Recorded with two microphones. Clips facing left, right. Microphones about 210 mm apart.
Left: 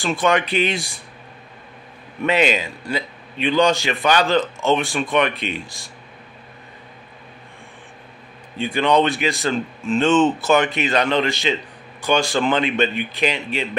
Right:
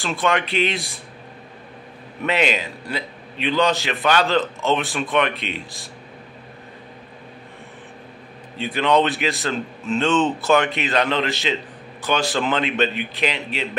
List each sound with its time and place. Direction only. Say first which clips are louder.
0.0 s a man's voice: left 3 dB; centre (ahead or behind)
2.2 s a man's voice: left 3 dB; centre (ahead or behind)
8.5 s a man's voice: left 1 dB; centre (ahead or behind)